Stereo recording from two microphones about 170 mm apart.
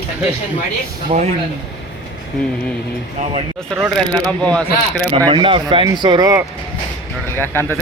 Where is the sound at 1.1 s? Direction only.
45° right (ahead or behind).